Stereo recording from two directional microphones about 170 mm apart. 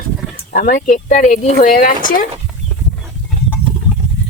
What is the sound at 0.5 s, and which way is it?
Speech, 50° left (ahead or behind).